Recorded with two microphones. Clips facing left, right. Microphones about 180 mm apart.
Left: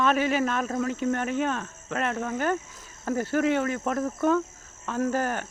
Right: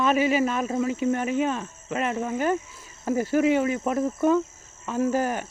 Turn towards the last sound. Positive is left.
turn(degrees=-10)  # may be behind; listen again after turning